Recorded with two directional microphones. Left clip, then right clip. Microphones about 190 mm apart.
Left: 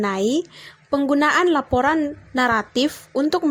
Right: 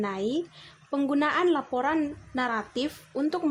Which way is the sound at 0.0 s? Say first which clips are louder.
Left 8 dB; 30° left (ahead or behind).